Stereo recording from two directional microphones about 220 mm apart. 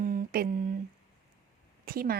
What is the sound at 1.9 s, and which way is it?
Speech, 40° right (ahead or behind).